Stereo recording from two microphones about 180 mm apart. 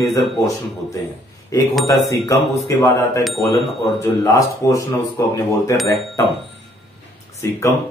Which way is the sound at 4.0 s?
20° left (ahead or behind).